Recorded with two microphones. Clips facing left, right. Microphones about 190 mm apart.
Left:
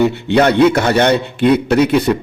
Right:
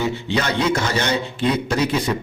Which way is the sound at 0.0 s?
60° left (ahead or behind).